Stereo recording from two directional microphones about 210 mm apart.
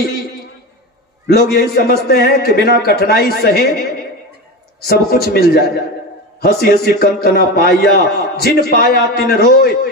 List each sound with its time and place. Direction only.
1.2 s a man's voice: 50° left (ahead or behind)
4.8 s a man's voice: 45° left (ahead or behind)